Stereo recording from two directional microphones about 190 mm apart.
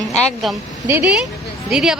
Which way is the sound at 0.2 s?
5° left (ahead or behind).